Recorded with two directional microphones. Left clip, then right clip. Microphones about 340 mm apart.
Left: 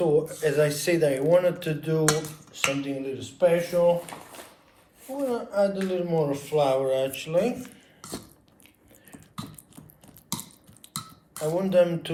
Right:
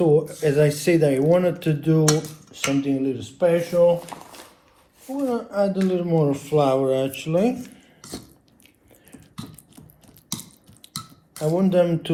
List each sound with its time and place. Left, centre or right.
0.0 s speech: centre
5.3 s speech: centre
11.5 s speech: centre